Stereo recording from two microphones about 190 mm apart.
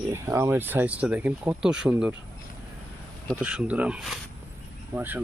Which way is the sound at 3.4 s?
5° right (ahead or behind).